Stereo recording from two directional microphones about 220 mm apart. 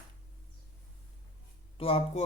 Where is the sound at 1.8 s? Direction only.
25° left (ahead or behind).